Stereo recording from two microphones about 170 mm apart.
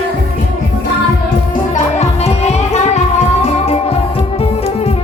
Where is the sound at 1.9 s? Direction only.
40° left (ahead or behind).